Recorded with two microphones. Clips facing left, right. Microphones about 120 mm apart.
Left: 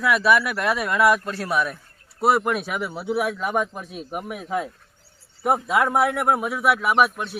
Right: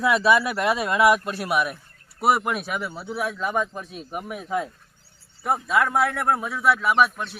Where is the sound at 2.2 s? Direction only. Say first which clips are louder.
Left 2 dB; 5° right (ahead or behind).